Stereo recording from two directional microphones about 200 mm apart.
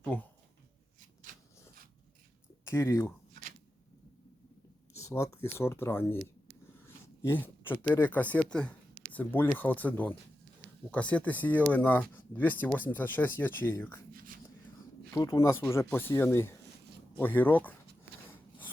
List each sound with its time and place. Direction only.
0.0 s speech: 5° left (ahead or behind)
2.6 s speech: 15° left (ahead or behind)
4.9 s speech: 15° left (ahead or behind)
6.8 s dog: 10° left (ahead or behind)
7.9 s speech: 10° left (ahead or behind)
15.1 s speech: 15° left (ahead or behind)